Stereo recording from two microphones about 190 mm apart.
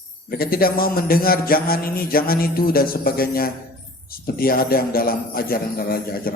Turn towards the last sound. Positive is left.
turn(degrees=50)  # may be behind; listen again after turning